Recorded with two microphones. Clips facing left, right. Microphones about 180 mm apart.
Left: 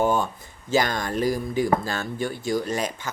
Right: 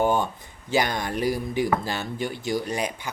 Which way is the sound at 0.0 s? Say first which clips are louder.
Even; 15° right (ahead or behind).